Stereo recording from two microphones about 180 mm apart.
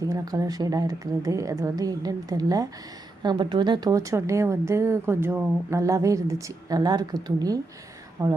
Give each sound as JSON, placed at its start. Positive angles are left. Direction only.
{"t": 0.1, "sound": "a woman's voice", "side_deg": -20}